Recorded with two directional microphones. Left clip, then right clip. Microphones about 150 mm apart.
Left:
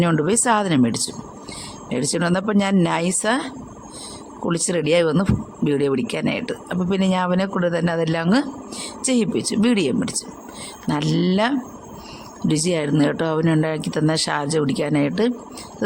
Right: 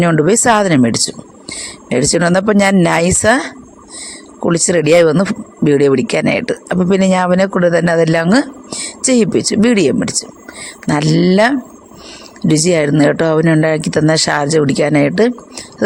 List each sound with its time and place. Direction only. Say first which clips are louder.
0.0 s speech: right 8 dB; 25° right (ahead or behind)